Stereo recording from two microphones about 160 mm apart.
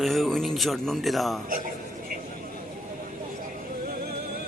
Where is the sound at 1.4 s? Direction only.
60° right (ahead or behind).